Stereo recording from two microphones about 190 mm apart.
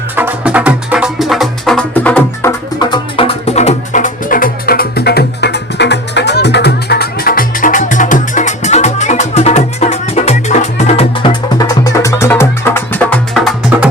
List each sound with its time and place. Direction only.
0.2 s music: 10° right (ahead or behind); by 2.5 s 10° left (ahead or behind)
2.7 s music: 25° left (ahead or behind); by 13.5 s 5° left (ahead or behind)